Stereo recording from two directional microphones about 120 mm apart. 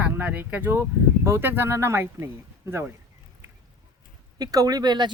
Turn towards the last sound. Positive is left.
turn(degrees=-35)  # may be behind; listen again after turning